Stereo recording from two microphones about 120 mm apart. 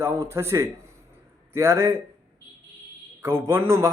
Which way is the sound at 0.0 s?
25° right (ahead or behind).